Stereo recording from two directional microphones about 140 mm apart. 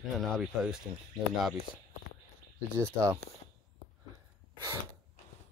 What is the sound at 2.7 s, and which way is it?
Speech, 20° right (ahead or behind).